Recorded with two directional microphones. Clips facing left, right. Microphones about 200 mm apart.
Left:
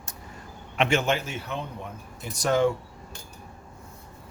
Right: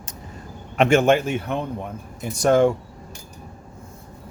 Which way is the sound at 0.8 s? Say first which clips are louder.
Right 8 dB; 50° right (ahead or behind).